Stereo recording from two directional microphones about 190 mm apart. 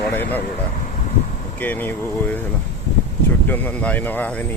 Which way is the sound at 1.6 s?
10° left (ahead or behind).